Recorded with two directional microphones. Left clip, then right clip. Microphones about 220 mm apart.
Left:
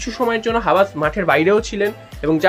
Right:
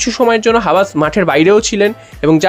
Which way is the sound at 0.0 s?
40° right (ahead or behind).